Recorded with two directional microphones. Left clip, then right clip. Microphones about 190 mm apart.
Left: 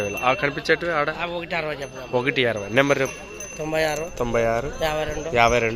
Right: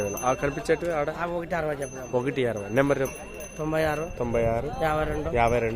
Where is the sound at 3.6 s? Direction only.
55° right (ahead or behind).